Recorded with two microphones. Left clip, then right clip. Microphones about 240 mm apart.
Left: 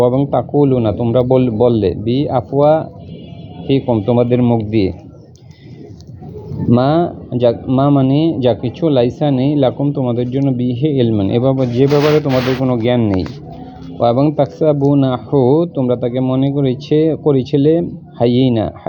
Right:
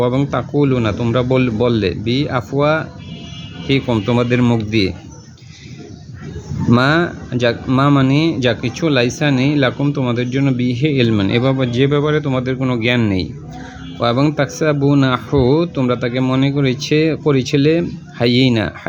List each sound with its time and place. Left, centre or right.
0.1 s speech: centre
3.8 s speech: right
4.3 s speech: centre
6.7 s speech: centre
14.0 s speech: centre